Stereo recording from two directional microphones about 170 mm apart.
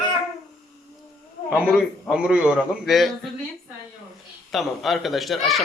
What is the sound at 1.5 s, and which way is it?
Speech, 5° right (ahead or behind).